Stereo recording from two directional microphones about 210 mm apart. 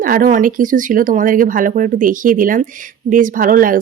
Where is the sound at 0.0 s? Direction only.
40° right (ahead or behind).